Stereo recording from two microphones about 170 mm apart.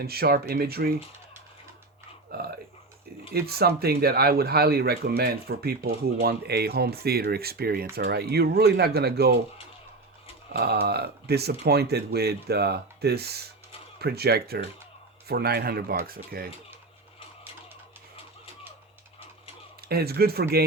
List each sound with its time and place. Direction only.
0.0 s speech: 65° right (ahead or behind)
3.3 s speech: 65° right (ahead or behind)
10.5 s speech: 70° right (ahead or behind)
19.9 s speech: 65° right (ahead or behind)